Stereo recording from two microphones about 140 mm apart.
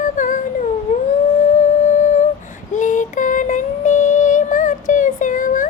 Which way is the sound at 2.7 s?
65° left (ahead or behind).